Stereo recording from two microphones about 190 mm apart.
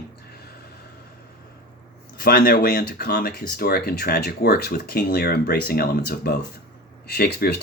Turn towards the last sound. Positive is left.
turn(degrees=55)  # may be behind; listen again after turning